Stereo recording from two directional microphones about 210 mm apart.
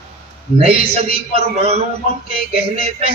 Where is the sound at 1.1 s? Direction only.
30° right (ahead or behind).